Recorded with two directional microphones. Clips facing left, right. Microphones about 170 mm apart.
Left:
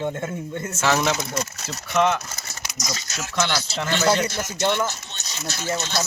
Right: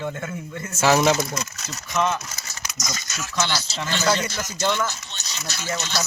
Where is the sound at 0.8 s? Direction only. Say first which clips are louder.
Right 4 dB; 10° right (ahead or behind).